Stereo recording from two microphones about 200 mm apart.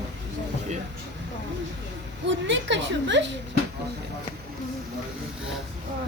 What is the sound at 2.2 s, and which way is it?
Speech, 65° right (ahead or behind).